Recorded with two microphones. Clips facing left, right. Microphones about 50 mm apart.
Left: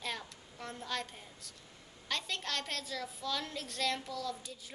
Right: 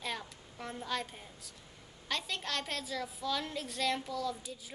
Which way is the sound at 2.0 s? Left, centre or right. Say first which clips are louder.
Right 1 dB; centre.